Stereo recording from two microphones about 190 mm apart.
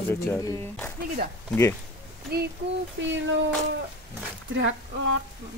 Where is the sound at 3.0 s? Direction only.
70° right (ahead or behind).